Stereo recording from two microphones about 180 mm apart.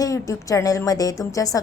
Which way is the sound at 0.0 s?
20° left (ahead or behind).